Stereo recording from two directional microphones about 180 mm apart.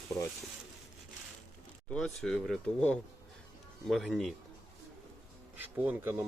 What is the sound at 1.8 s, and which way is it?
Speech, centre (ahead or behind).